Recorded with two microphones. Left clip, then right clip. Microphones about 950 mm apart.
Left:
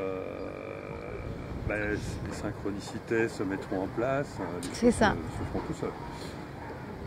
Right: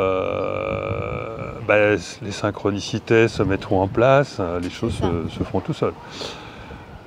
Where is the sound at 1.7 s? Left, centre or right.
Right.